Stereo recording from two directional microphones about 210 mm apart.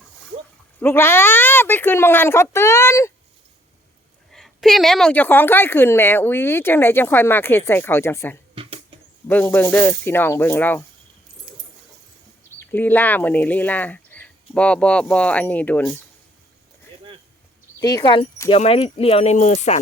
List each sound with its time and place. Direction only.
0.8 s a woman's voice: 10° left (ahead or behind)
4.3 s a woman's voice: centre (ahead or behind)
8.5 s a sound: 25° right (ahead or behind)
9.2 s a woman's voice: 10° left (ahead or behind)
12.5 s speech: 10° left (ahead or behind)
17.7 s speech: 20° left (ahead or behind)